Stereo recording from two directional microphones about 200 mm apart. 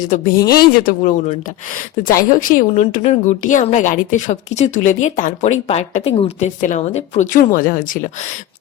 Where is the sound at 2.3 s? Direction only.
35° left (ahead or behind).